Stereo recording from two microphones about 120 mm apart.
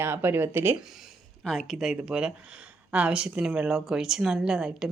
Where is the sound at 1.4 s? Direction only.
Centre (ahead or behind).